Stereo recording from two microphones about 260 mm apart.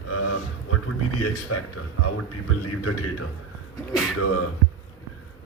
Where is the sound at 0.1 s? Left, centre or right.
Left.